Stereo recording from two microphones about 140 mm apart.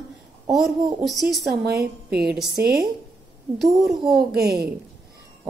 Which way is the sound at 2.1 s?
10° right (ahead or behind).